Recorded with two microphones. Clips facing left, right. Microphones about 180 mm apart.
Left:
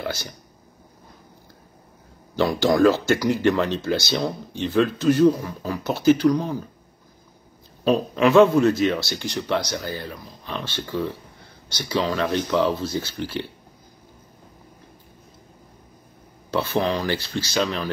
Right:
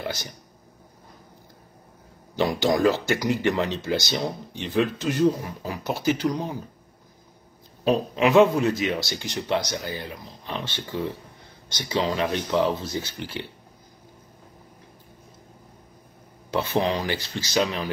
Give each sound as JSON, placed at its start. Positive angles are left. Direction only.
{"t": 0.0, "sound": "speech", "side_deg": -15}
{"t": 2.3, "sound": "a man's voice", "side_deg": -20}
{"t": 7.8, "sound": "a man's voice", "side_deg": -20}
{"t": 16.4, "sound": "a man's voice", "side_deg": -20}